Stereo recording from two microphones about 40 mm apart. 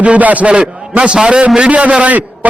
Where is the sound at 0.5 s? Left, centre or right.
Right.